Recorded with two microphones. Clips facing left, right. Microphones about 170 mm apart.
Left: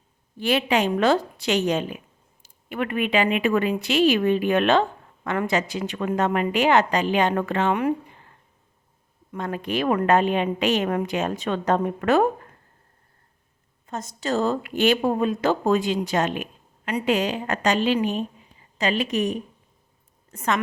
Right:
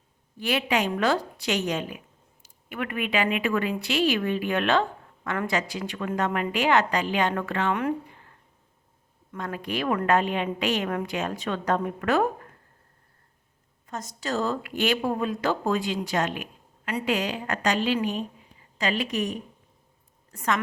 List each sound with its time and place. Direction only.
0.3 s speech: 30° left (ahead or behind)
9.3 s speech: 25° left (ahead or behind)
13.8 s a woman's voice: 25° left (ahead or behind)